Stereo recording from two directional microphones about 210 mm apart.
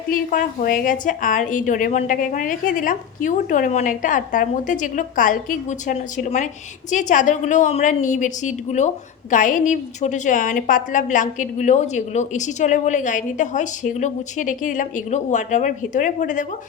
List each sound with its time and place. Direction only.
0.1 s a woman's voice: 40° left (ahead or behind)